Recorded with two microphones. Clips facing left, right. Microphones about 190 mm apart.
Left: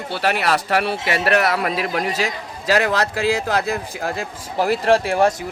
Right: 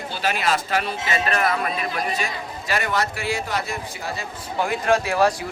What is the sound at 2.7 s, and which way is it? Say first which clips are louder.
Speech: left 6 dB; 75° left (ahead or behind).